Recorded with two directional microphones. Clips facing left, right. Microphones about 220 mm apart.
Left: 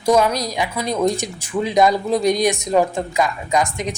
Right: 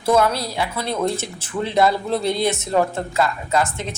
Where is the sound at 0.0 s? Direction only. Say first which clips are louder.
Left 2 dB; 15° left (ahead or behind).